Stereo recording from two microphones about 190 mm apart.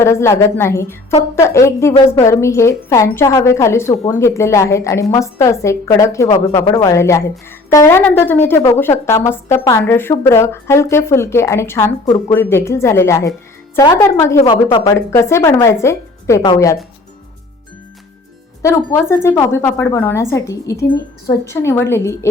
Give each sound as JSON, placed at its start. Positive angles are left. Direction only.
{"t": 0.0, "sound": "a woman's voice", "side_deg": 15}
{"t": 18.6, "sound": "a woman's voice", "side_deg": 15}